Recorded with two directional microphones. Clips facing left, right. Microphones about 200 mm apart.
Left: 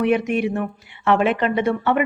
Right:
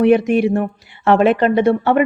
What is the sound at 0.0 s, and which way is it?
Speech, 35° right (ahead or behind).